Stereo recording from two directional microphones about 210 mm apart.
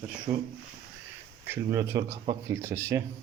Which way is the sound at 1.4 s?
15° right (ahead or behind).